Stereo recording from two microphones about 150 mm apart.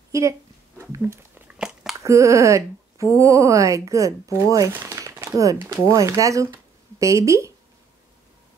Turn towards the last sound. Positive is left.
turn(degrees=-20)  # may be behind; listen again after turning